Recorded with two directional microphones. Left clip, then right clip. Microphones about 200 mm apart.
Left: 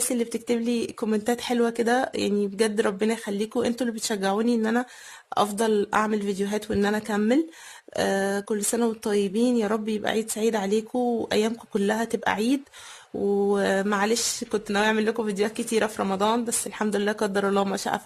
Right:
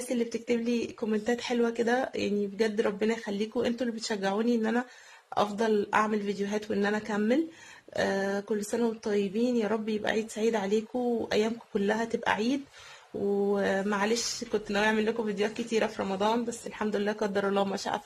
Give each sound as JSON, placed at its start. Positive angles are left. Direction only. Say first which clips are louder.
{"t": 0.1, "sound": "speech", "louder": "left 2 dB", "side_deg": 35}